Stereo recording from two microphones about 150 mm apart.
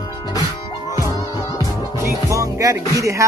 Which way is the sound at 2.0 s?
20° right (ahead or behind).